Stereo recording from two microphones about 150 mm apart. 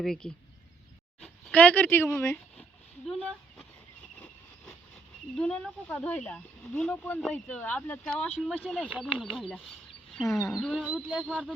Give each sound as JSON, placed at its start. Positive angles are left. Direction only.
{"t": 0.0, "sound": "speech", "side_deg": 5}
{"t": 5.4, "sound": "speech", "side_deg": 5}
{"t": 10.3, "sound": "speech", "side_deg": 20}
{"t": 10.6, "sound": "speech", "side_deg": -5}